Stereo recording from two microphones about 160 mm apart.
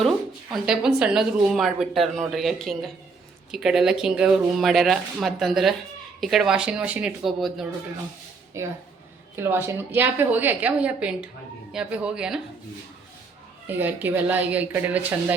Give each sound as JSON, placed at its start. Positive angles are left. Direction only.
{"t": 0.5, "sound": "a woman's voice", "side_deg": -5}
{"t": 8.6, "sound": "a woman's voice", "side_deg": -15}
{"t": 13.7, "sound": "a woman's voice", "side_deg": -10}